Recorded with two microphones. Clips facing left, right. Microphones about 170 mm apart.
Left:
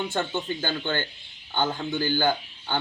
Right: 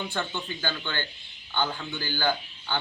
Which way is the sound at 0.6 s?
50° left (ahead or behind).